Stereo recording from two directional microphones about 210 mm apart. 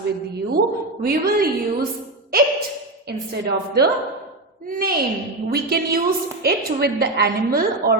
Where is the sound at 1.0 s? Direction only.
45° right (ahead or behind).